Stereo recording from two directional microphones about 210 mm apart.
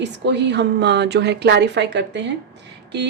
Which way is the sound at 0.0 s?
55° right (ahead or behind).